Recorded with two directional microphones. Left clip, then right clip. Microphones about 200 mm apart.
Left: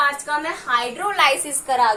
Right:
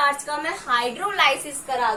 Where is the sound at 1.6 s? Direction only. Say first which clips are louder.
Left 5 dB; 40° left (ahead or behind).